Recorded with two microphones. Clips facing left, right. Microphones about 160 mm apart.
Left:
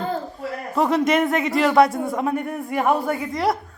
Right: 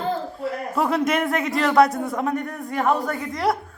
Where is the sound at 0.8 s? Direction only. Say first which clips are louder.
Left 3 dB; centre (ahead or behind).